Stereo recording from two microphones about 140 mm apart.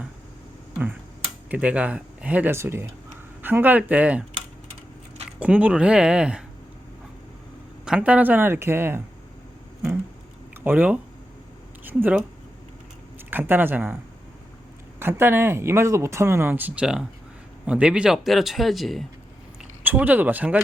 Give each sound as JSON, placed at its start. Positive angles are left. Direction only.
{"t": 1.5, "sound": "speech", "side_deg": -10}
{"t": 5.4, "sound": "speech", "side_deg": -10}
{"t": 7.9, "sound": "speech", "side_deg": -10}
{"t": 10.6, "sound": "speech", "side_deg": -10}
{"t": 13.3, "sound": "speech", "side_deg": -15}
{"t": 14.9, "sound": "speech", "side_deg": -15}
{"t": 19.8, "sound": "speech", "side_deg": -10}